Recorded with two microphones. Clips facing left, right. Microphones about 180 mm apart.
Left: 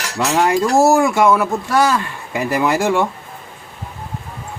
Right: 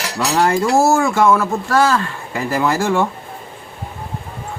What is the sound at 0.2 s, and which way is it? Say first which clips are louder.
Speech: left 1 dB; 15° left (ahead or behind).